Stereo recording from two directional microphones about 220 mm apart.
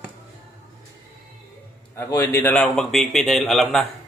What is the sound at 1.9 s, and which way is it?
Speech, 10° left (ahead or behind).